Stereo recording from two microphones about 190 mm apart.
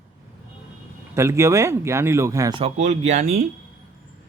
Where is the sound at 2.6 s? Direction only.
40° right (ahead or behind).